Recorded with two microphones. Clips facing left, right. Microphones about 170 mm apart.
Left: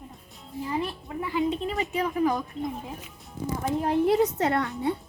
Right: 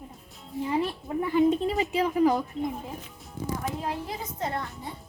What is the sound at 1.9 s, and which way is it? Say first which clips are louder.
Speech: right 2 dB; 30° right (ahead or behind).